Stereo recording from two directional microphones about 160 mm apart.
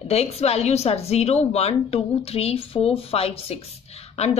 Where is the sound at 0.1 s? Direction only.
40° left (ahead or behind).